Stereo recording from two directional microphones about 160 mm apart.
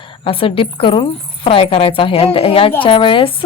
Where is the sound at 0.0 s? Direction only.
35° left (ahead or behind).